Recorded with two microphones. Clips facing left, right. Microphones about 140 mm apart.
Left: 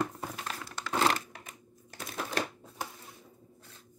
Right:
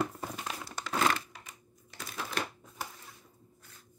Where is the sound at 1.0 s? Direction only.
35° left (ahead or behind).